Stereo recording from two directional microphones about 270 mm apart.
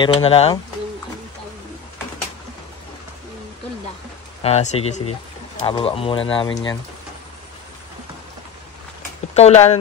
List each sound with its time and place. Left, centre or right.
0.0 s speech: left
4.4 s speech: left
9.3 s speech: left